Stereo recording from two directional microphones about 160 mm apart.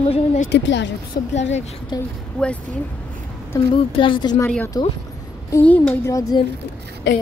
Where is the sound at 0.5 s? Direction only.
90° left.